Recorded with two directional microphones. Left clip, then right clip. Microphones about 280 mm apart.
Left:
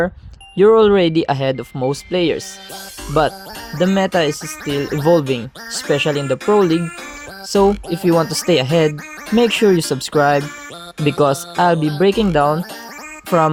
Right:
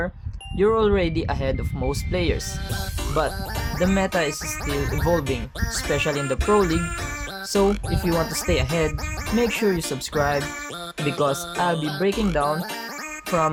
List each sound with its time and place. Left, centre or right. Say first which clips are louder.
0.5 s speech: left 9 dB; left
7.9 s speech: left 8 dB; left